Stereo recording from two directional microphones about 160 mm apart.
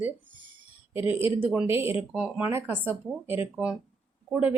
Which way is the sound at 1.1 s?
10° right (ahead or behind).